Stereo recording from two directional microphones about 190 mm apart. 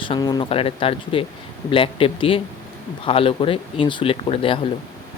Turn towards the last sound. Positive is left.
turn(degrees=30)  # may be behind; listen again after turning